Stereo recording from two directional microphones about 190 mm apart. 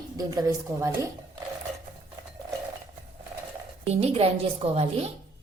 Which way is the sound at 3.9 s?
30° right (ahead or behind).